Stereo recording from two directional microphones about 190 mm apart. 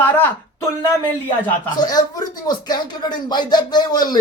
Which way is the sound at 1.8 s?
20° left (ahead or behind).